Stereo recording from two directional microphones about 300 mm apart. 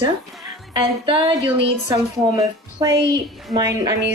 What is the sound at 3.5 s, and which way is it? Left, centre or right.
Speech, centre.